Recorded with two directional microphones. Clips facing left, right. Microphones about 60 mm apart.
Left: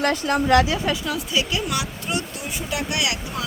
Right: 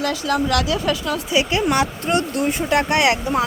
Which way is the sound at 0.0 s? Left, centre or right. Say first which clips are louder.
Even; left.